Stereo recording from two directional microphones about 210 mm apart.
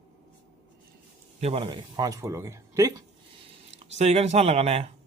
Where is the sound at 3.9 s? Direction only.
30° right (ahead or behind).